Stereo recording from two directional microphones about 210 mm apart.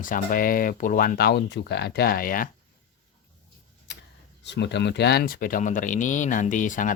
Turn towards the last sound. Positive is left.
turn(degrees=40)  # may be behind; listen again after turning